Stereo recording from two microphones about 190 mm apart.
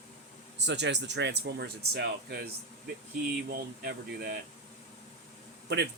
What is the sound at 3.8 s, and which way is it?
Speech, 55° right (ahead or behind).